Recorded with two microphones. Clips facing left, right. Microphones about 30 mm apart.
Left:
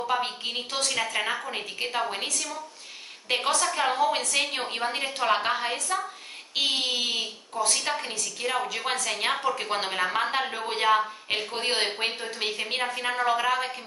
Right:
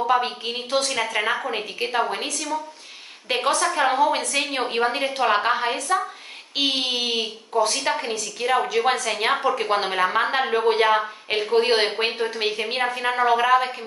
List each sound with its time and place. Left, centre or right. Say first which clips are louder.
0.1 s a woman's voice: right 6 dB; centre
9.3 s a woman's voice: right 6 dB; right
9.6 s a woman's voice: right 6 dB; centre